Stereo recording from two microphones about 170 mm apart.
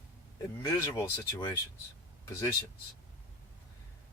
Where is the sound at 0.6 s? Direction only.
15° left (ahead or behind).